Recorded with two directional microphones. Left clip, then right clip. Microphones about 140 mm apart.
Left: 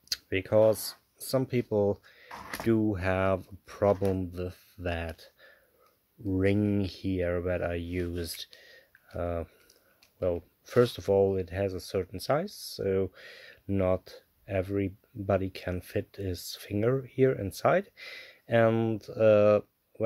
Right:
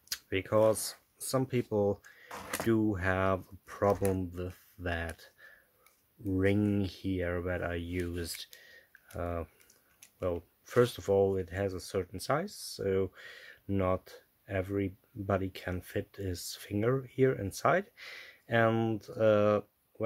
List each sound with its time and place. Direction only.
0.1 s speech: 35° left (ahead or behind)
2.2 s drawer open or close: 5° right (ahead or behind)
2.6 s speech: 35° left (ahead or behind)
8.5 s typing: 35° left (ahead or behind)
10.1 s speech: 35° left (ahead or behind)